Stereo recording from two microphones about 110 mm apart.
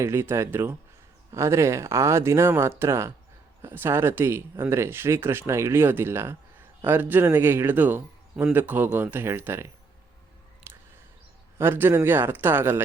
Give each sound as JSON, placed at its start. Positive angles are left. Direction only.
{"t": 0.0, "sound": "speech", "side_deg": -25}
{"t": 10.7, "sound": "a sound", "side_deg": -20}
{"t": 11.5, "sound": "speech", "side_deg": -20}